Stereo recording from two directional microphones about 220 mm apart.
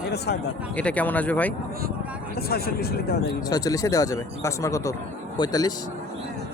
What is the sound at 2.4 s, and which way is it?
Speech, 45° left (ahead or behind).